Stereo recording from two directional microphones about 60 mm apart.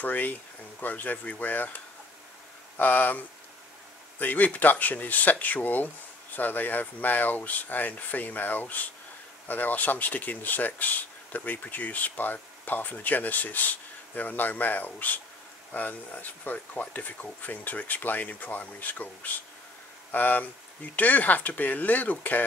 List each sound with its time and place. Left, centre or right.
0.0 s speech: left
2.8 s speech: left
4.2 s speech: left